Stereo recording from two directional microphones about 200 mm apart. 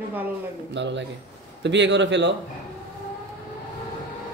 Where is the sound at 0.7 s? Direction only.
65° right (ahead or behind).